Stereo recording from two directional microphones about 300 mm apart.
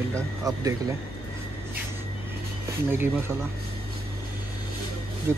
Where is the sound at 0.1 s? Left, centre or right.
Centre.